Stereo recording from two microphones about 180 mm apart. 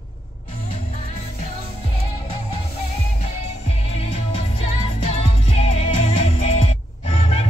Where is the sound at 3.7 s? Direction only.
35° left (ahead or behind).